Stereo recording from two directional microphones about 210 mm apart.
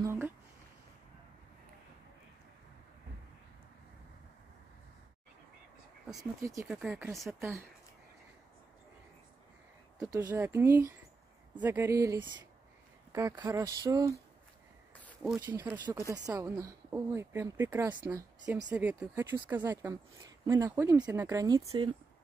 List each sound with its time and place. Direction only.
0.0 s a sound: 10° right (ahead or behind)
6.4 s a woman's voice: 15° right (ahead or behind)
9.9 s a woman's voice: 15° right (ahead or behind)
15.3 s a woman's voice: 10° right (ahead or behind)